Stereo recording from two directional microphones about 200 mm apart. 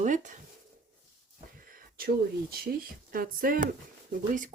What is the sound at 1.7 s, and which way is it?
Speech, 50° right (ahead or behind).